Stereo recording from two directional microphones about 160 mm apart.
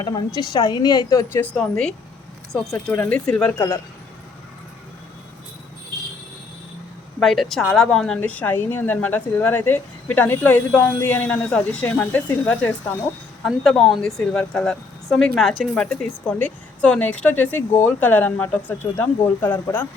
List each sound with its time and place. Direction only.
0.3 s a woman's voice: 25° left (ahead or behind); by 3.5 s 5° left (ahead or behind)
7.2 s a woman's voice: centre (ahead or behind)
13.4 s a woman's voice: centre (ahead or behind)